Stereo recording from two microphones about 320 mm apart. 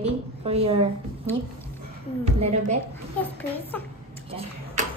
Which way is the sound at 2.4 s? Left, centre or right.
Centre.